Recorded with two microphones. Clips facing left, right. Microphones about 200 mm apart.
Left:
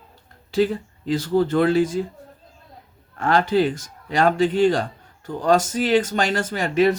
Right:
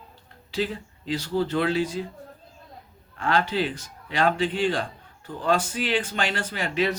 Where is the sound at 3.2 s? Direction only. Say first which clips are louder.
Left 6 dB; 45° left (ahead or behind).